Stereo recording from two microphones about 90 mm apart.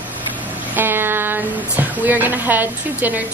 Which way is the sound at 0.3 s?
20° right (ahead or behind).